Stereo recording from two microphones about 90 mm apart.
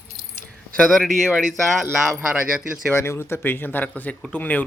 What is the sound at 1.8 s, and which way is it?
Speech, 10° right (ahead or behind).